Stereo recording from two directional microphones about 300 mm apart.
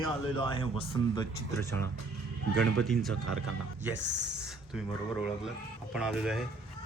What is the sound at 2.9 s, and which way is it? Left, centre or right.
Speech, centre.